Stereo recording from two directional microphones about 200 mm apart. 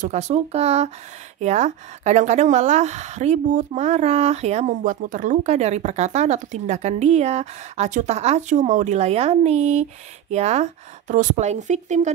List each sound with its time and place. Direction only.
0.0 s a woman's voice: 35° right (ahead or behind)